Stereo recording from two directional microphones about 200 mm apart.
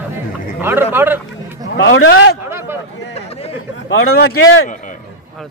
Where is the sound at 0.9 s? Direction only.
10° right (ahead or behind).